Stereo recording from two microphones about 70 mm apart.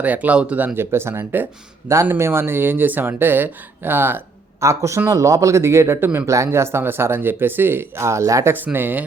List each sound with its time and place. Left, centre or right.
0.0 s speech: right
0.8 s speech: right
4.6 s speech: right
8.5 s speech: right